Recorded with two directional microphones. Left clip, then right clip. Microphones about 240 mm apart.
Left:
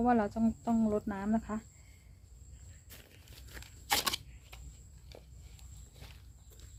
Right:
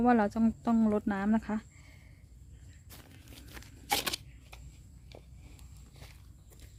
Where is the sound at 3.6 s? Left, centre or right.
Right.